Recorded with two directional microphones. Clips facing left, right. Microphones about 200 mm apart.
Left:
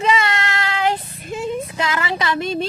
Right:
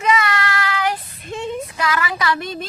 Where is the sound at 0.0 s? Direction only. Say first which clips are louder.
Even; 25° left (ahead or behind).